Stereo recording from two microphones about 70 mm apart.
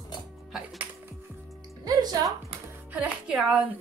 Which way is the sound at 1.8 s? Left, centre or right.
Right.